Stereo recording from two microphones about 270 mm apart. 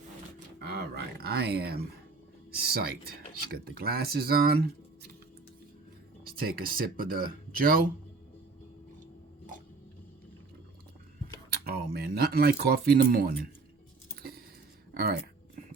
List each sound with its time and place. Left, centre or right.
0.6 s speech: right
6.2 s speech: right
11.6 s speech: right
14.2 s a sound: right
14.9 s speech: right